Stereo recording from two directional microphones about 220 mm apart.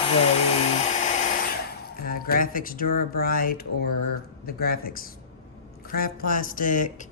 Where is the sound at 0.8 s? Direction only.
35° left (ahead or behind).